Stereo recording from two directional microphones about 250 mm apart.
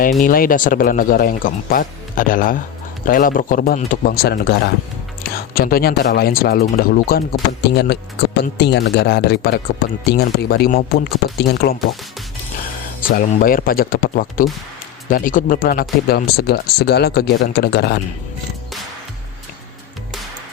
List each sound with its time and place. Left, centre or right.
0.2 s speech: left
13.0 s speech: left